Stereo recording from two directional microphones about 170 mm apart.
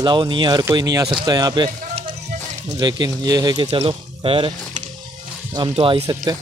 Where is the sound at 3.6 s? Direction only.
35° right (ahead or behind).